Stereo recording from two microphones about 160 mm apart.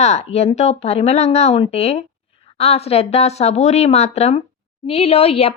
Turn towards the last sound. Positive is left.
turn(degrees=40)  # may be behind; listen again after turning